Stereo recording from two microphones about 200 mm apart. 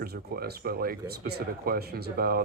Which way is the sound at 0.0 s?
50° right (ahead or behind).